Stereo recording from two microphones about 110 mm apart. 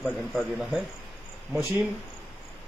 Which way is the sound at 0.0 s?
Centre (ahead or behind).